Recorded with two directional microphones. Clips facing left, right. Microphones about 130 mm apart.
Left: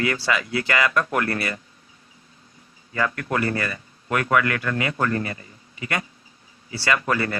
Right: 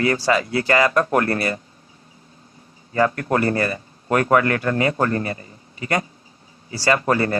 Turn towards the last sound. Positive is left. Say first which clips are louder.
# right 4 dB
turn(degrees=-35)  # may be behind; listen again after turning